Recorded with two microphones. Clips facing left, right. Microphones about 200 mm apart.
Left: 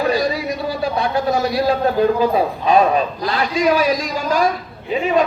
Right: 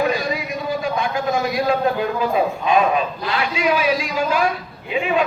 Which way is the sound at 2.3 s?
35° left (ahead or behind).